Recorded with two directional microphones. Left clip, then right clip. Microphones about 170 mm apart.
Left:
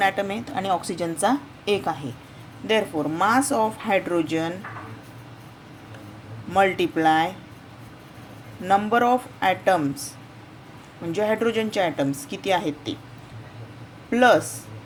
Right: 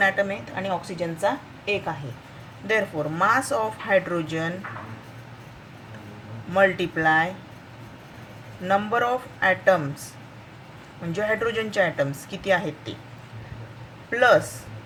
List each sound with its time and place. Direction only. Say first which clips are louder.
0.0 s speech: right 1 dB; 20° left (ahead or behind)
0.5 s a woman's voice: left 4 dB; 35° left (ahead or behind)
2.6 s speech: left 1 dB; 20° left (ahead or behind)
6.5 s speech: even; 20° left (ahead or behind)
8.6 s speech: left 3 dB; 20° left (ahead or behind)
11.1 s a woman's voice: left 2 dB; 15° left (ahead or behind)
14.1 s a woman's voice: left 1 dB; 15° left (ahead or behind)